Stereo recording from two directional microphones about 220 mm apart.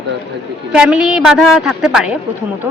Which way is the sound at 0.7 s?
5° right (ahead or behind).